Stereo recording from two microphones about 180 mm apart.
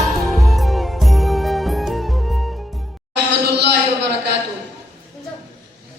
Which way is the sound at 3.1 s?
70° right (ahead or behind).